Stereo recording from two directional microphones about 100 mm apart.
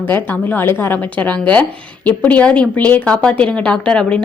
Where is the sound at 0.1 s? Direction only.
20° left (ahead or behind).